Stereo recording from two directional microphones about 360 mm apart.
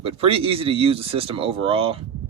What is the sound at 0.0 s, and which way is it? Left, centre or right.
Speech, centre.